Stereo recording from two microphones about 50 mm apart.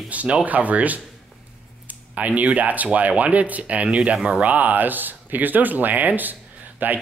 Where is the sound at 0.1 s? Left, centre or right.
Right.